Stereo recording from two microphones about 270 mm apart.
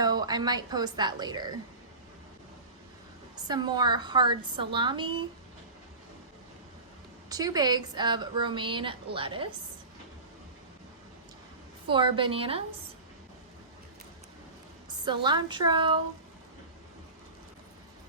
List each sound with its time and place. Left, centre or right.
0.0 s a woman's voice: centre
3.4 s a woman's voice: centre
7.3 s a woman's voice: centre
11.9 s a woman's voice: centre
14.8 s a woman's voice: centre